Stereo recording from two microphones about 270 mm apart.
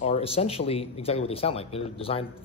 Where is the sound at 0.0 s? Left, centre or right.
Left.